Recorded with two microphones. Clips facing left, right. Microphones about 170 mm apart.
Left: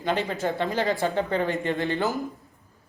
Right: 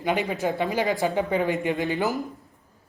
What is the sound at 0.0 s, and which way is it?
A man's voice, 15° right (ahead or behind).